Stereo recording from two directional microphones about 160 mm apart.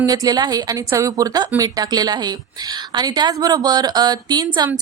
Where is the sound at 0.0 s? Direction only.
20° right (ahead or behind).